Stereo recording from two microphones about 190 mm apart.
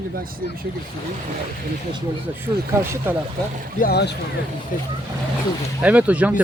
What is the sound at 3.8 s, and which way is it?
Speech, 60° left (ahead or behind).